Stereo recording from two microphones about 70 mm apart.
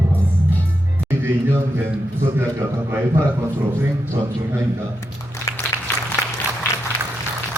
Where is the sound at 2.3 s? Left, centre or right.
Right.